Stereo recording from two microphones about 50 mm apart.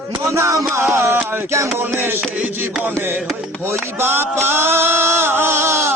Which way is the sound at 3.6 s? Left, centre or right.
Right.